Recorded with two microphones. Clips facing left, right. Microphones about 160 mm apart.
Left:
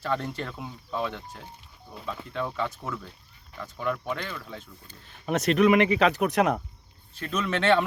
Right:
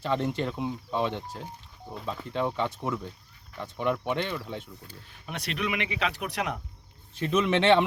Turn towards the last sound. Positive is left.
turn(degrees=-20)  # may be behind; listen again after turning